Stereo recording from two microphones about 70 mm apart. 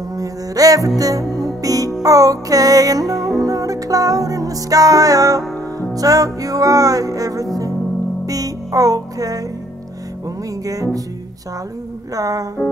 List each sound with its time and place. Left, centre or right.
0.2 s music: right
10.6 s music: right
12.2 s music: right